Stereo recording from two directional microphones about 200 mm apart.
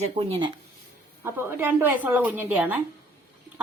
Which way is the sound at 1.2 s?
10° right (ahead or behind).